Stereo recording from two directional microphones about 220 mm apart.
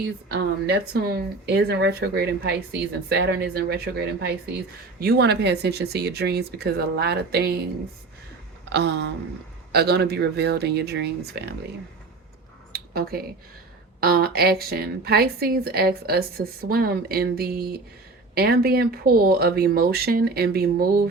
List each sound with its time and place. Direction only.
0.3 s speech: 45° right (ahead or behind)
8.7 s speech: 50° right (ahead or behind)
12.7 s a sound: 45° right (ahead or behind)
14.0 s speech: 45° right (ahead or behind)